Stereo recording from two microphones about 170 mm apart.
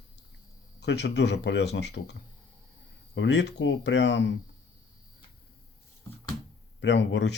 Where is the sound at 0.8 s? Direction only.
90° left.